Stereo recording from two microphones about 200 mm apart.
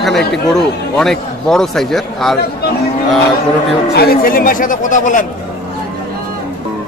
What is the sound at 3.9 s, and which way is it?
Speech, 50° left (ahead or behind).